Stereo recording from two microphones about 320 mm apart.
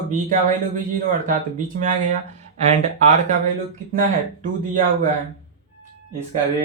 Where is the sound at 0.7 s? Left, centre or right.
Right.